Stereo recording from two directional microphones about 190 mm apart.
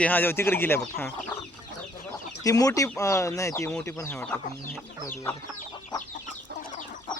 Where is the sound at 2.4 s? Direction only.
20° left (ahead or behind).